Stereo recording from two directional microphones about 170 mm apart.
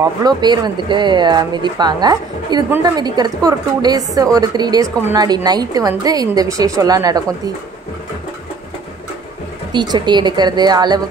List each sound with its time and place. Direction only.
0.0 s speech: 25° right (ahead or behind)
9.7 s speech: 25° right (ahead or behind)